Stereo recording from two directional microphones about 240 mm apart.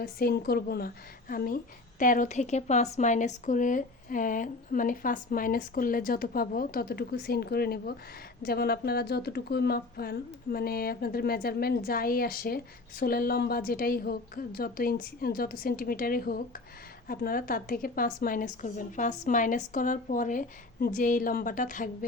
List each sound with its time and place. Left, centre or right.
0.0 s speech: left